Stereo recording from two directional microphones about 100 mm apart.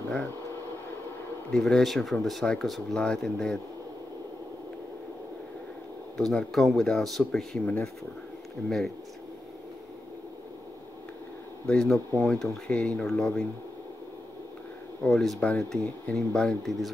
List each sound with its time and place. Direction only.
1.5 s speech: 5° left (ahead or behind)
6.1 s speech: 5° left (ahead or behind)
7.6 s speech: 15° left (ahead or behind)
8.6 s speech: centre (ahead or behind)
11.6 s speech: 10° left (ahead or behind)
15.0 s speech: 5° left (ahead or behind)